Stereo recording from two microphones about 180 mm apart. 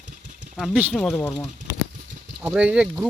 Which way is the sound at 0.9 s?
5° left (ahead or behind).